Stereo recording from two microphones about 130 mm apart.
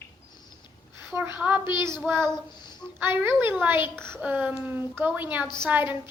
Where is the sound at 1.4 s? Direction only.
Centre (ahead or behind).